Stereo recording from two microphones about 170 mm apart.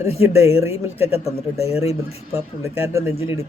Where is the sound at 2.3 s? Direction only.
15° right (ahead or behind).